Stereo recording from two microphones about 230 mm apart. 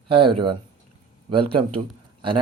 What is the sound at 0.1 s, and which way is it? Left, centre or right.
Speech, right.